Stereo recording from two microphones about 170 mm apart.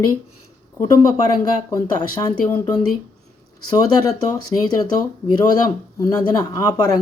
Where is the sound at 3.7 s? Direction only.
20° left (ahead or behind).